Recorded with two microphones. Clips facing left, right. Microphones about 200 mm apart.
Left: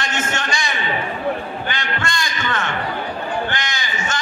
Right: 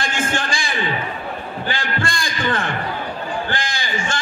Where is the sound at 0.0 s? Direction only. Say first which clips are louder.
Right 1 dB; 30° right (ahead or behind).